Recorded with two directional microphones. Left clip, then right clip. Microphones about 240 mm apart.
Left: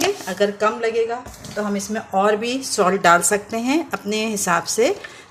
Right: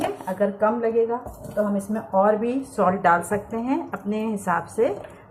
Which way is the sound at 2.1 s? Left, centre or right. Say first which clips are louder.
Left 1 dB; left.